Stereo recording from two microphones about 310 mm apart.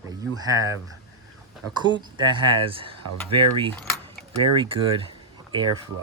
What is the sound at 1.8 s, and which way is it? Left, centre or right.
Speech, centre.